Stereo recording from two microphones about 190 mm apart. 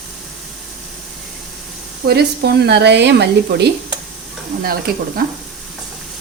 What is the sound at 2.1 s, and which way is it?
Speech, 60° right (ahead or behind).